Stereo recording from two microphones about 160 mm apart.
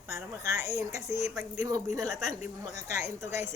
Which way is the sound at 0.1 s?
20° right (ahead or behind).